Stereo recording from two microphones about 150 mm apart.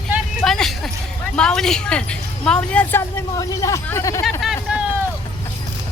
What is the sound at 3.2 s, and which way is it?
Speech, 20° left (ahead or behind).